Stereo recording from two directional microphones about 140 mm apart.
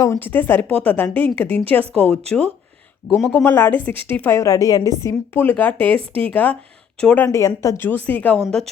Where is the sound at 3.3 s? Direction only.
15° left (ahead or behind).